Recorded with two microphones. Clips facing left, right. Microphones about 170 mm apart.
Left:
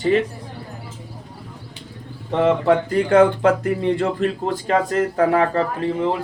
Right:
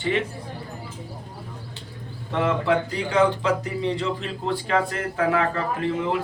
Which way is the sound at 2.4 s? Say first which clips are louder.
Left 5 dB; 50° left (ahead or behind).